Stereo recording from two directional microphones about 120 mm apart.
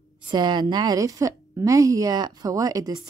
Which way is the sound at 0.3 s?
40° right (ahead or behind).